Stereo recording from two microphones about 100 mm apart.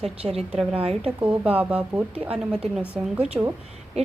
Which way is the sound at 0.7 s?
75° right (ahead or behind).